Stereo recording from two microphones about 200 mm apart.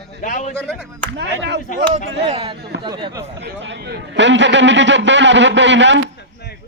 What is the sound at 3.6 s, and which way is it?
A man's voice, 65° right (ahead or behind).